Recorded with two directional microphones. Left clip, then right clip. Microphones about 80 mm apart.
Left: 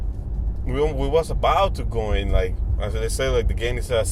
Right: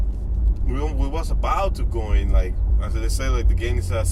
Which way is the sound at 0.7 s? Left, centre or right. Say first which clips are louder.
Left 8 dB; left.